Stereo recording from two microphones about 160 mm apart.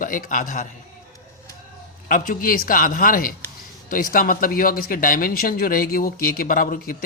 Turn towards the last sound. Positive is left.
turn(degrees=60)  # may be behind; listen again after turning